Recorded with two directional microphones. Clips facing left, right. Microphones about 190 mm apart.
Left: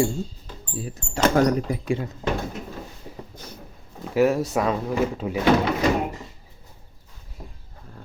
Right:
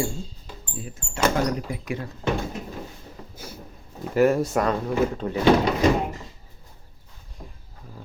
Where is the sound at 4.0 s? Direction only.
Centre (ahead or behind).